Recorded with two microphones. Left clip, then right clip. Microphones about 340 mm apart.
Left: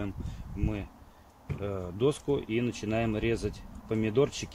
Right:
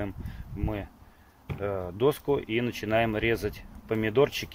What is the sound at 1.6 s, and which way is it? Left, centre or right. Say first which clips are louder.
Speech: right 3 dB; right.